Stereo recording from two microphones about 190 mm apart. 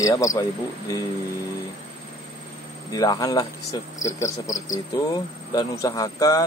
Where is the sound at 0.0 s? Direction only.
15° left (ahead or behind).